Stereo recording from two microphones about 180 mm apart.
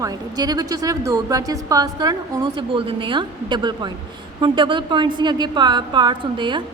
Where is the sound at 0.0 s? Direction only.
20° right (ahead or behind).